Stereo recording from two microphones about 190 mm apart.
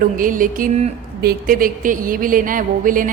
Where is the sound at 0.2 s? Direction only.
45° right (ahead or behind).